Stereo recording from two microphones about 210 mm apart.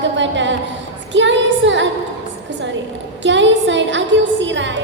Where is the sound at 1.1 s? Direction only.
60° right (ahead or behind).